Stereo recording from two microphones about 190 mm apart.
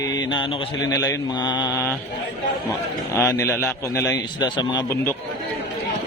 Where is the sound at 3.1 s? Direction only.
15° left (ahead or behind).